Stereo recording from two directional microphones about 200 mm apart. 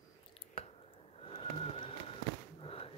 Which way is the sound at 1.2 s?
30° left (ahead or behind).